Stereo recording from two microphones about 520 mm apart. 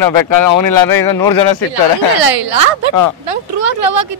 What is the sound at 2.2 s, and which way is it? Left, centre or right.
A woman's voice, right.